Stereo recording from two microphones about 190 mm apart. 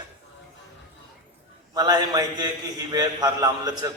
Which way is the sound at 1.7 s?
20° right (ahead or behind).